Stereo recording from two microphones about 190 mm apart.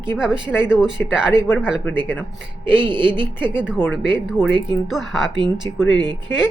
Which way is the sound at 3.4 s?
5° right (ahead or behind).